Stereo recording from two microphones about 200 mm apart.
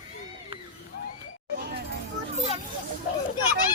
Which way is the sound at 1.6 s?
55° right (ahead or behind).